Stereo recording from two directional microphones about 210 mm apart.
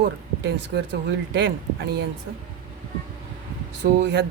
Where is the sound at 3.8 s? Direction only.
55° right (ahead or behind).